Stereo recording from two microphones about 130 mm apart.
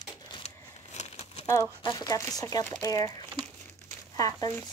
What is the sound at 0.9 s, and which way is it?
Crumpling, 55° left (ahead or behind).